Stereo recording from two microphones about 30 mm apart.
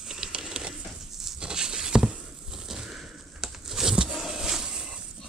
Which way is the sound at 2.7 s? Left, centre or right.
Right.